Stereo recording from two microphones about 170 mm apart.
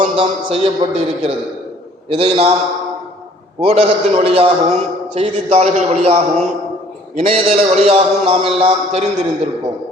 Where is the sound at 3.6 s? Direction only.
35° right (ahead or behind).